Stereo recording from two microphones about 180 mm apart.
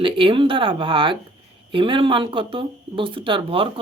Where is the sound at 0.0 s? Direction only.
30° right (ahead or behind).